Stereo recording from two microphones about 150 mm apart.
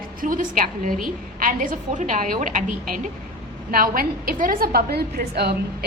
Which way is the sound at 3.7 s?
75° right (ahead or behind).